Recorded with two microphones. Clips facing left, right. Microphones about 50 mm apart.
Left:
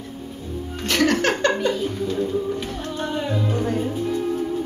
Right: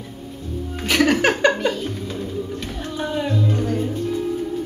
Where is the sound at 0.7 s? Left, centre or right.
Centre.